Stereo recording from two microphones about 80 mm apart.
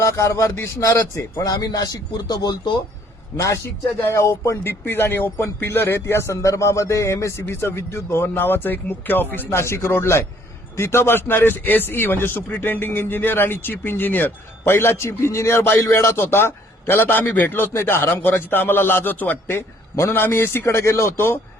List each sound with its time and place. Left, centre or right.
0.0 s a man's voice: left
1.5 s a man's voice: left
3.3 s a man's voice: left